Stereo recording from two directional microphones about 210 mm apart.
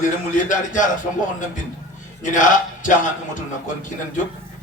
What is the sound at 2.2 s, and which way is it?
Speech, 40° left (ahead or behind).